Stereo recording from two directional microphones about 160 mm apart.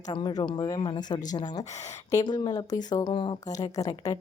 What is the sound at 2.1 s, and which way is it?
Speech, 30° left (ahead or behind).